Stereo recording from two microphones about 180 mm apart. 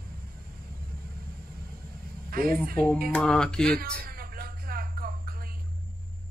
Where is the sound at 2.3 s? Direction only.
55° right (ahead or behind).